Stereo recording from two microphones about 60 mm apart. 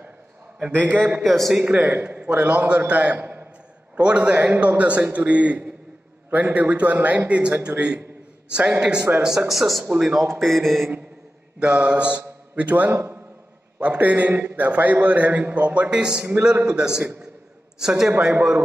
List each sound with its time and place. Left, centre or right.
0.7 s a man's voice: right
1.2 s mantra: centre
1.6 s a man's voice: right
9.5 s mantra: centre
9.8 s a man's voice: centre
10.4 s mantra: centre
11.6 s a man's voice: centre